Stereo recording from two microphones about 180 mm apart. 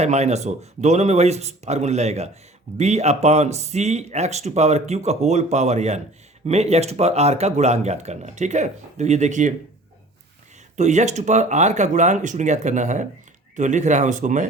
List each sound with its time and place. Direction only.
0.0 s speech: 40° right (ahead or behind)
10.8 s speech: 40° right (ahead or behind)